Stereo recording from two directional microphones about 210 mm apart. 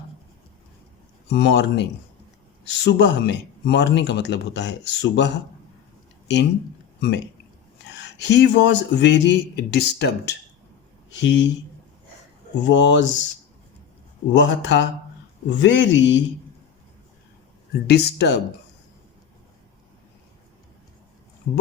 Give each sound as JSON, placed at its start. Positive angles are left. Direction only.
{"t": 1.3, "sound": "speech", "side_deg": 55}
{"t": 7.9, "sound": "speech", "side_deg": 55}
{"t": 12.6, "sound": "speech", "side_deg": 60}
{"t": 14.3, "sound": "speech", "side_deg": 60}
{"t": 17.7, "sound": "speech", "side_deg": 50}